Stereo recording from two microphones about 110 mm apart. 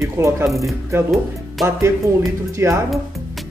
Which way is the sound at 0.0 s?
25° right (ahead or behind).